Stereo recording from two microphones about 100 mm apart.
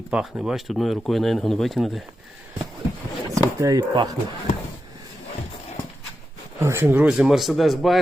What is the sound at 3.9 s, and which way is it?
Speech, 50° right (ahead or behind).